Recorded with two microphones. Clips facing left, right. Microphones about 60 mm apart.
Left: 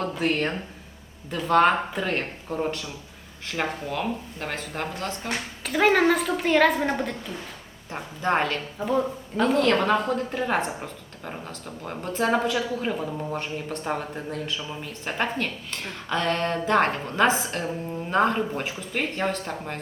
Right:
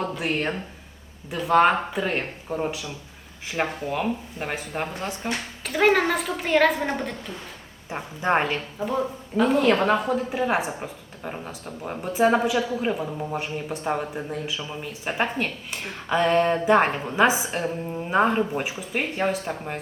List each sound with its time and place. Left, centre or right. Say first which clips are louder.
0.1 s speech: left 1 dB; centre
5.6 s a woman's voice: even; centre
7.9 s speech: right 2 dB; centre
8.8 s speech: left 3 dB; centre